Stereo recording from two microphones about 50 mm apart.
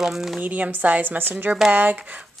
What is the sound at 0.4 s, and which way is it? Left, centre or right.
A woman's voice, right.